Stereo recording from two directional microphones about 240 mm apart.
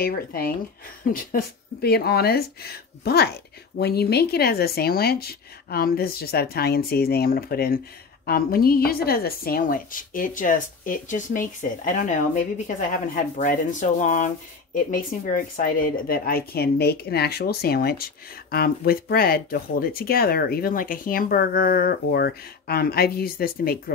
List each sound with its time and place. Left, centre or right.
0.0 s a woman's voice: left